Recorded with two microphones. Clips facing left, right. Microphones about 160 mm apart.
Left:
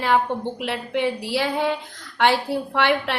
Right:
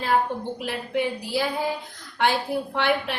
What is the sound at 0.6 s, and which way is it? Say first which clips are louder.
A woman's voice: left 2 dB; 75° left (ahead or behind).